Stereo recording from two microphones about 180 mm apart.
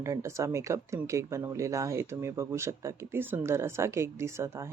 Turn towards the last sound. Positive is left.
turn(degrees=-15)  # may be behind; listen again after turning